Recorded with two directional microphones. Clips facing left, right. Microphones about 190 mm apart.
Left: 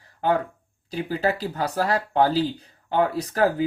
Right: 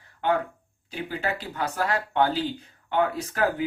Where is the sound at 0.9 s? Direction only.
35° left (ahead or behind).